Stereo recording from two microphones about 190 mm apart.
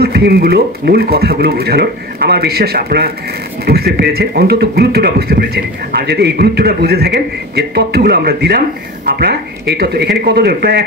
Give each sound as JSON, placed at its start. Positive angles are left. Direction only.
{"t": 0.0, "sound": "speech", "side_deg": -55}